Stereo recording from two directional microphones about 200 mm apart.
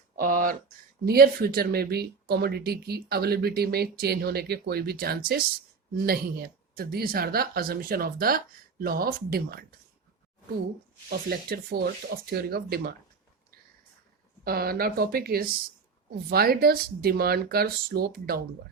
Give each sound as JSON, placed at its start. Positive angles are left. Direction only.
{"t": 0.2, "sound": "a sound", "side_deg": -45}
{"t": 1.0, "sound": "speech", "side_deg": -50}
{"t": 11.1, "sound": "speech", "side_deg": -50}
{"t": 14.4, "sound": "speech", "side_deg": -50}